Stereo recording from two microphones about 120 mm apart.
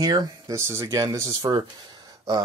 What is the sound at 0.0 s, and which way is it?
Speech, 30° right (ahead or behind).